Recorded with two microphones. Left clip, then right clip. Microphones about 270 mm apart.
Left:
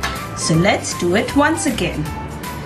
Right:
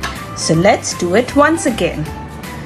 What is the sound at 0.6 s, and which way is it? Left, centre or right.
A woman's voice, right.